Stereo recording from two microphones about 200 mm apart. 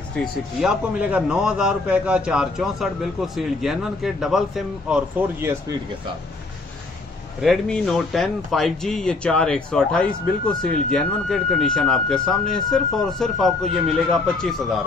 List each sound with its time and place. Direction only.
0.2 s speech: centre (ahead or behind)
7.4 s speech: centre (ahead or behind)